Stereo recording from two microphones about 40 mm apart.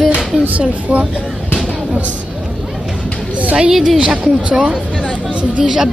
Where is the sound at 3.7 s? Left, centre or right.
Centre.